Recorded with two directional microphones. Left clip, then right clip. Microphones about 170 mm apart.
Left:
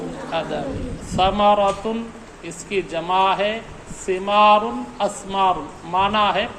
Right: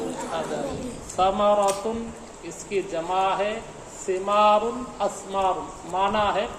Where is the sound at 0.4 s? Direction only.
35° left (ahead or behind).